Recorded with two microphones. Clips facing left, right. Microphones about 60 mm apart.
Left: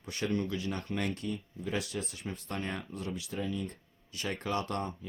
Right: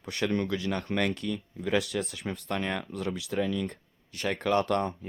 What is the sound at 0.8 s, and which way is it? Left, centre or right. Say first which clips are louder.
Speech: right 6 dB; right.